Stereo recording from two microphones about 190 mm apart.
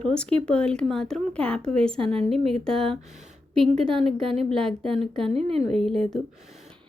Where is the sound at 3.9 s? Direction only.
5° left (ahead or behind).